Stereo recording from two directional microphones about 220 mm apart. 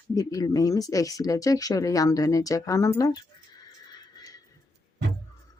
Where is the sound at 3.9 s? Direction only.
15° left (ahead or behind).